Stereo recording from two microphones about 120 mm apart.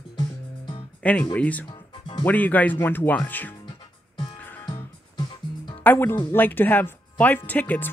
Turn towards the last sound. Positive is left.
turn(degrees=15)  # may be behind; listen again after turning